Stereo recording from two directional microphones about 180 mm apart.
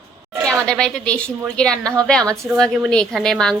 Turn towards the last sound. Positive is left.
turn(degrees=5)  # may be behind; listen again after turning